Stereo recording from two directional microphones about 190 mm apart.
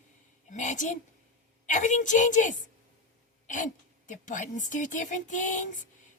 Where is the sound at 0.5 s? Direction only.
40° left (ahead or behind).